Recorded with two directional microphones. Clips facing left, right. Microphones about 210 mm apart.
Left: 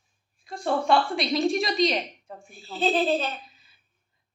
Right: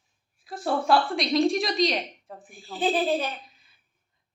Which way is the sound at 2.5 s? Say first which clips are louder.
Left 1 dB; 15° right (ahead or behind).